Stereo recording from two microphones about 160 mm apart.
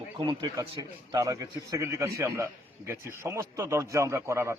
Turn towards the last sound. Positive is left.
turn(degrees=-15)  # may be behind; listen again after turning